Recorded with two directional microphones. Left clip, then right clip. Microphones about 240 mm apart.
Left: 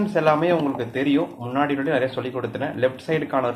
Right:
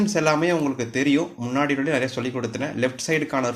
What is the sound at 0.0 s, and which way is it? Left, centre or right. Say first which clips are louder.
Speech: left 2 dB; right.